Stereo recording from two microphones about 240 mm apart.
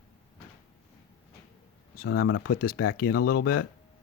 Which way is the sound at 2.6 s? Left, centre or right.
Left.